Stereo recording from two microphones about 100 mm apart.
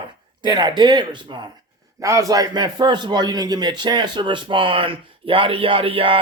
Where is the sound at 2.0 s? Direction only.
35° right (ahead or behind).